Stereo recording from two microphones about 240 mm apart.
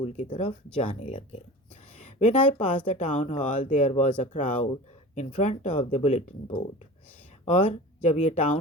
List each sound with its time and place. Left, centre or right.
0.0 s a woman's voice: left